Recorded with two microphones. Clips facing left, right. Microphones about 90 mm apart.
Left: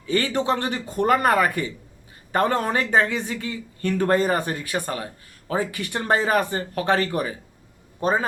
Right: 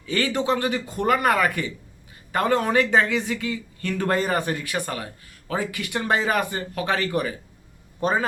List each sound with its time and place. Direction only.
0.0 s a man's voice: 25° left (ahead or behind)